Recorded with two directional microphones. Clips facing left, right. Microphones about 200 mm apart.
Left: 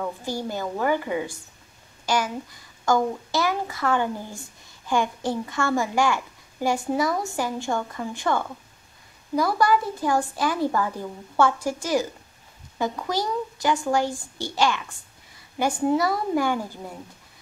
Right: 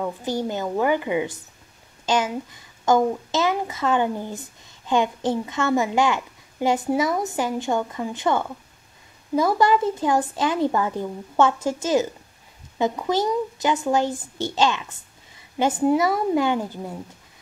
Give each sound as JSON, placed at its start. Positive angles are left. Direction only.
{"t": 0.0, "sound": "a woman's voice", "side_deg": -20}